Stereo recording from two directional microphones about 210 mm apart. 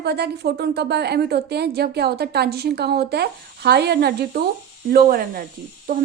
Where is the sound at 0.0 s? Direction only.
50° right (ahead or behind).